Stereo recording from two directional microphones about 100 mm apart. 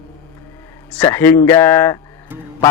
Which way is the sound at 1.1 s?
25° left (ahead or behind).